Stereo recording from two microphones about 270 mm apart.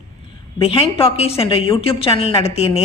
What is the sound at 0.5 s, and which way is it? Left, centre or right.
A woman's voice, left.